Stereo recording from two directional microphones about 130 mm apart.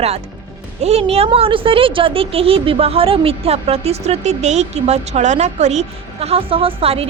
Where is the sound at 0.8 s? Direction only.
50° right (ahead or behind).